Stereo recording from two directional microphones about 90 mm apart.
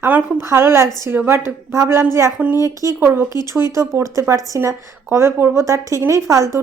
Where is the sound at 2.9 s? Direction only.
25° right (ahead or behind).